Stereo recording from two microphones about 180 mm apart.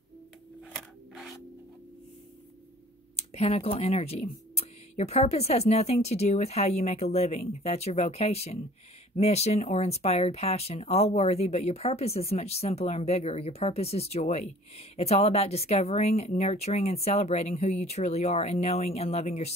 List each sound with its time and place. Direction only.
0.7 s scissors: centre (ahead or behind)
3.2 s speech: 35° left (ahead or behind)